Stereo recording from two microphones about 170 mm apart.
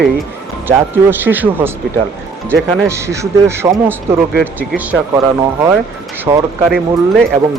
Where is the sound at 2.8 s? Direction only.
15° right (ahead or behind).